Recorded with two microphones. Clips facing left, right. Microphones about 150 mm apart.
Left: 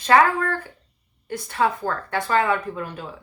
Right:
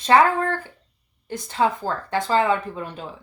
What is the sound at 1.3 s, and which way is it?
Speech, 20° right (ahead or behind).